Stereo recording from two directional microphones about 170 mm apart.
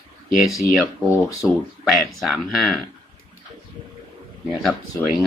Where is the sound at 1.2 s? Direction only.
20° left (ahead or behind).